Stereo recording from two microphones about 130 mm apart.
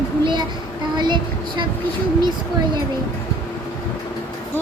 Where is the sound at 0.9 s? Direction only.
35° right (ahead or behind).